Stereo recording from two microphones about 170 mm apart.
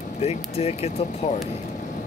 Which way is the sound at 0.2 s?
35° left (ahead or behind).